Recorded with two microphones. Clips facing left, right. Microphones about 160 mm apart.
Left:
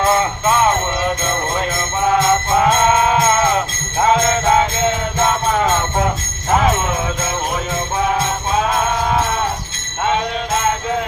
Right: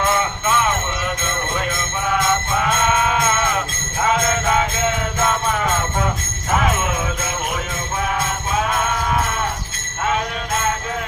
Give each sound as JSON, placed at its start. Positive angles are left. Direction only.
{"t": 0.0, "sound": "music", "side_deg": 30}
{"t": 2.0, "sound": "music", "side_deg": 30}
{"t": 8.5, "sound": "music", "side_deg": 25}